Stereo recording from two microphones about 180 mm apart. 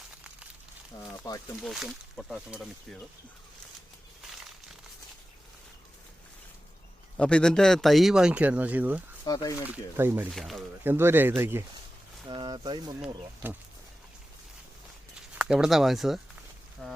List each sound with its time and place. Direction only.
0.9 s speech: 15° left (ahead or behind)
1.6 s speech: centre (ahead or behind)
7.2 s speech: 5° left (ahead or behind)
9.2 s speech: 20° left (ahead or behind)
9.6 s speech: 10° right (ahead or behind)
10.2 s speech: centre (ahead or behind)
10.8 s speech: 10° right (ahead or behind)
12.3 s speech: 25° right (ahead or behind)
13.0 s speech: 10° right (ahead or behind)
15.4 s speech: 5° right (ahead or behind)